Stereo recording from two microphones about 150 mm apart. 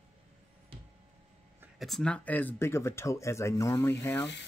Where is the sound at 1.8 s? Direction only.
Centre (ahead or behind).